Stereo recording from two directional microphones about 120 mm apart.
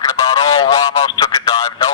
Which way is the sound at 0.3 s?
40° left (ahead or behind).